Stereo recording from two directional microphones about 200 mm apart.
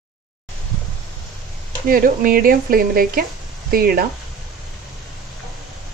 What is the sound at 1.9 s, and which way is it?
Speech, 45° right (ahead or behind).